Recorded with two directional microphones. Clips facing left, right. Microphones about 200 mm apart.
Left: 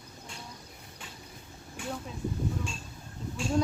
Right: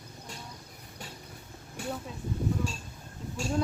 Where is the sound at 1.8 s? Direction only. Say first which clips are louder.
Right 2 dB; 40° right (ahead or behind).